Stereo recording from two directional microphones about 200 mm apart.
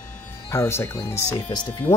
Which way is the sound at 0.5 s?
10° left (ahead or behind).